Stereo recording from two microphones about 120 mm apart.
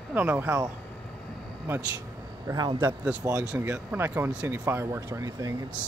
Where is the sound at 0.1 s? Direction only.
15° right (ahead or behind).